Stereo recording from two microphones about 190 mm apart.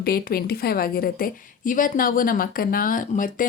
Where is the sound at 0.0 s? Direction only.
50° left (ahead or behind).